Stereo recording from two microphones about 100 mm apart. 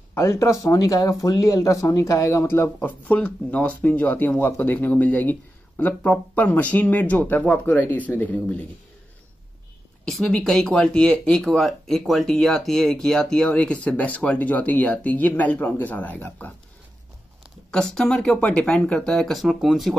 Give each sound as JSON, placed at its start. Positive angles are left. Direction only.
{"t": 0.1, "sound": "speech", "side_deg": 30}
{"t": 10.0, "sound": "speech", "side_deg": 5}
{"t": 17.6, "sound": "speech", "side_deg": 5}